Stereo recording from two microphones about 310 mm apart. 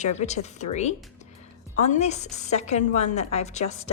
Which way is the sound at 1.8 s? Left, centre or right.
Left.